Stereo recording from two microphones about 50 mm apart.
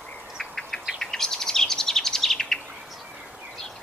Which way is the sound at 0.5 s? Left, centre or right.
Centre.